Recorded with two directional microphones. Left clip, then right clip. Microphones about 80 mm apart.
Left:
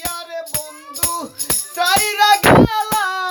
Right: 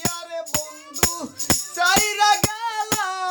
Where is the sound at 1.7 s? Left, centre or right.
Right.